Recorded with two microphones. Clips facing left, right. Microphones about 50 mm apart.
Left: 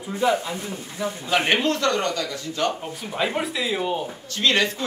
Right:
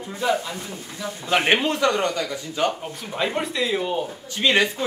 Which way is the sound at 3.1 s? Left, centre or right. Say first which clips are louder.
Even; centre.